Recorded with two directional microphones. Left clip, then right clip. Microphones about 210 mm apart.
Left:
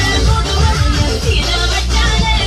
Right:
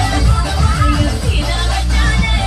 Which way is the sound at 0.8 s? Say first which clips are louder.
Right 2 dB; centre (ahead or behind).